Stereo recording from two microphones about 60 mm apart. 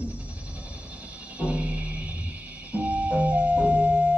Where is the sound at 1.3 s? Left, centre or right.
Right.